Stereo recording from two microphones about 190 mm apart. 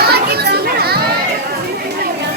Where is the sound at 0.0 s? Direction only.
55° right (ahead or behind).